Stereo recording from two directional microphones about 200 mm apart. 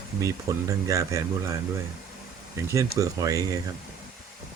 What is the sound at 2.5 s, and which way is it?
Speech, 15° right (ahead or behind).